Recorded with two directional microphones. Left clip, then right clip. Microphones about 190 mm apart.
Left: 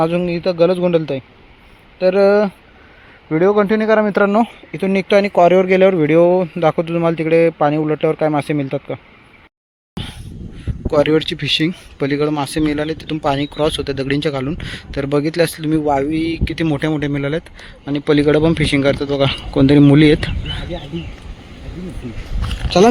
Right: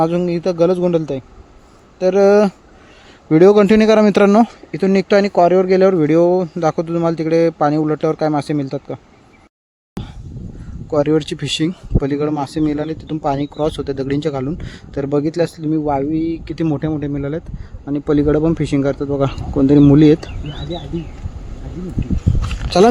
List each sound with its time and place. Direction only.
0.0 s speech: 10° right (ahead or behind)
3.2 s speech: 40° right (ahead or behind); by 5.3 s 20° right (ahead or behind)
5.3 s speech: centre (ahead or behind)
10.0 s vehicle: centre (ahead or behind)
10.9 s speech: 5° right (ahead or behind)
11.3 s speech: 20° right (ahead or behind)
16.8 s speech: centre (ahead or behind)